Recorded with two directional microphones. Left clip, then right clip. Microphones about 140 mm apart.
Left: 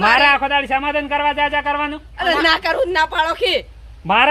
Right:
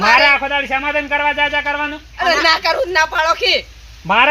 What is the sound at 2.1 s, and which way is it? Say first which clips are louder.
A woman's voice: right 2 dB; 40° left (ahead or behind).